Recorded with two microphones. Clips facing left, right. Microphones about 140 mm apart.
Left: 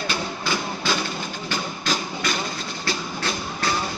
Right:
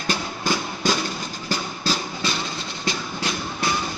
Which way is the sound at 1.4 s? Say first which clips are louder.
Right 2 dB; 35° right (ahead or behind).